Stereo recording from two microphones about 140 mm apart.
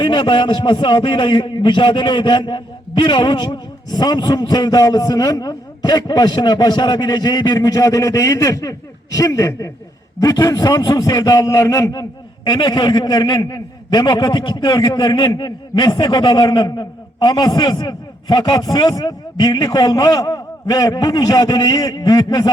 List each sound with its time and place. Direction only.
0.0 s a man's voice: 35° left (ahead or behind)